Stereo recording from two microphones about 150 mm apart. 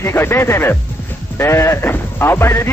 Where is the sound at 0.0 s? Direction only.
15° left (ahead or behind).